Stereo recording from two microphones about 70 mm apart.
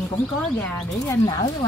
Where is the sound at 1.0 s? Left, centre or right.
Left.